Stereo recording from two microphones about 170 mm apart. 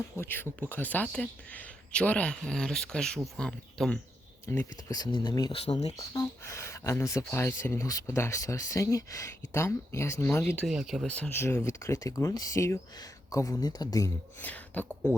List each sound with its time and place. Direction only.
0.2 s speech: 10° left (ahead or behind)
4.4 s speech: 20° left (ahead or behind)
5.6 s speech: 40° left (ahead or behind)
6.0 s speech: 20° left (ahead or behind)
10.7 s speech: centre (ahead or behind); by 14.5 s 20° left (ahead or behind)
14.5 s speech: 10° left (ahead or behind)